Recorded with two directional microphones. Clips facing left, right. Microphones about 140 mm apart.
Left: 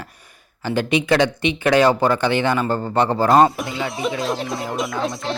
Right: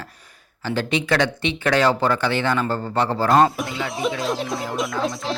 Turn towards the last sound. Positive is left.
turn(degrees=0)  # may be behind; listen again after turning